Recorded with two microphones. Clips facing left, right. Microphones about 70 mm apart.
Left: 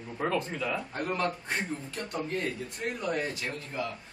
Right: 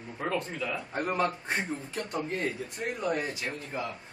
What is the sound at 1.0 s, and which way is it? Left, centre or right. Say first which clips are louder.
Speech: right 5 dB; centre.